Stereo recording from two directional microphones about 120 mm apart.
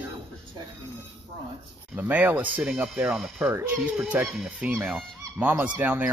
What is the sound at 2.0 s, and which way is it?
Speech, 10° right (ahead or behind).